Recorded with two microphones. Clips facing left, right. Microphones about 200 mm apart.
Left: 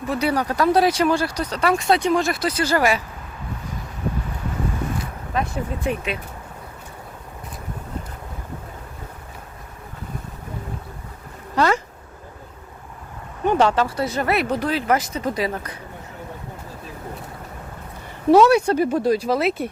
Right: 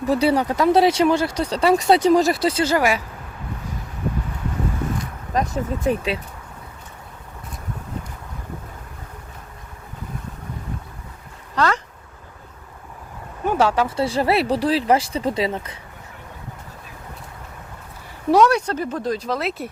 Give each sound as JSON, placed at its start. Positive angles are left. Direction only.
{"t": 0.1, "sound": "speech", "side_deg": -30}
{"t": 2.7, "sound": "speech", "side_deg": -10}
{"t": 5.3, "sound": "speech", "side_deg": -40}
{"t": 11.5, "sound": "speech", "side_deg": 10}
{"t": 13.4, "sound": "a sound", "side_deg": -5}
{"t": 13.8, "sound": "speech", "side_deg": -30}
{"t": 18.3, "sound": "speech", "side_deg": 5}